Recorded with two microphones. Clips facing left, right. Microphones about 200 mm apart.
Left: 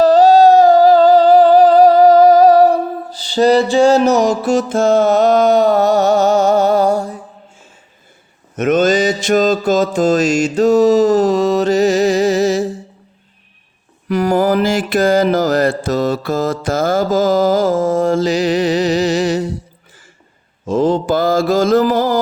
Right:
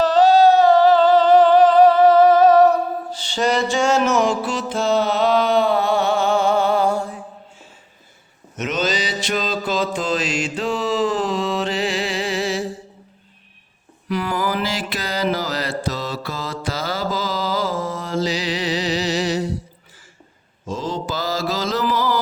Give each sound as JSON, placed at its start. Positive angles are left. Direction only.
{"t": 0.0, "sound": "a sound", "side_deg": 40}
{"t": 8.5, "sound": "mantra", "side_deg": 50}
{"t": 14.1, "sound": "mantra", "side_deg": 45}
{"t": 20.7, "sound": "mantra", "side_deg": 55}